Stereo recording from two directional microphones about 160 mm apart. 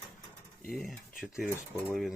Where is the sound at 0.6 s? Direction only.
Centre (ahead or behind).